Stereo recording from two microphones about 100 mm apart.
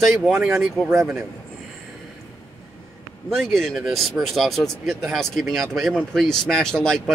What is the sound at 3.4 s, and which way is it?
Speech, 5° left (ahead or behind).